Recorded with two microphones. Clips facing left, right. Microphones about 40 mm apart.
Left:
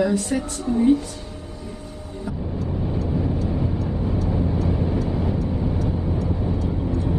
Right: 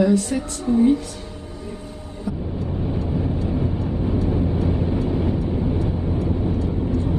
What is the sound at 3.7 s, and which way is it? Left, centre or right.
Vehicle, centre.